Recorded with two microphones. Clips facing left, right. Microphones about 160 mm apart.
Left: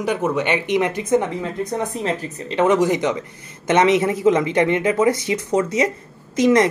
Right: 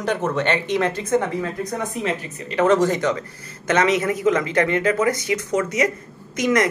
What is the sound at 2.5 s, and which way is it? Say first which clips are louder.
Speech: left 1 dB; 15° left (ahead or behind).